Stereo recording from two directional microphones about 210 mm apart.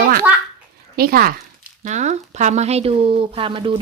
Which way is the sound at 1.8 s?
35° right (ahead or behind).